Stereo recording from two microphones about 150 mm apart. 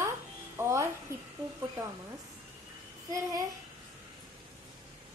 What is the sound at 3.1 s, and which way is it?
Speech, 25° right (ahead or behind).